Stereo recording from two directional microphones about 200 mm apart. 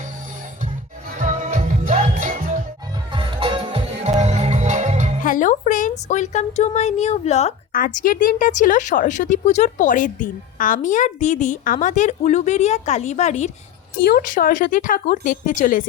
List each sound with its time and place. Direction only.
1.2 s music: 40° right (ahead or behind)
3.1 s music: 25° right (ahead or behind)
5.2 s music: 40° left (ahead or behind)
6.1 s a woman's voice: 35° left (ahead or behind)